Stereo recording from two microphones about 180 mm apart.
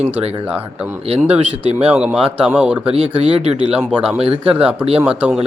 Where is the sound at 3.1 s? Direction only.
35° right (ahead or behind).